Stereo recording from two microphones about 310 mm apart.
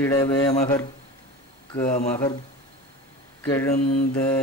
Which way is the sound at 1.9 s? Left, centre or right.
Left.